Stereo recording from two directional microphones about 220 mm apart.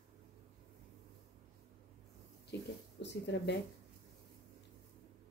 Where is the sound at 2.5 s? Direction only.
50° left (ahead or behind).